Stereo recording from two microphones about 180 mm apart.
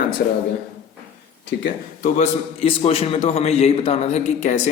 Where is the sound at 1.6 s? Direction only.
45° left (ahead or behind).